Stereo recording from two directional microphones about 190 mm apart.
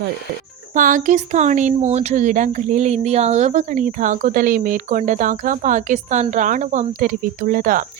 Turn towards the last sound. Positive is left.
turn(degrees=-45)  # may be behind; listen again after turning